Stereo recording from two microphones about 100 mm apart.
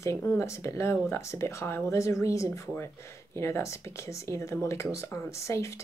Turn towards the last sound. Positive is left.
turn(degrees=30)  # may be behind; listen again after turning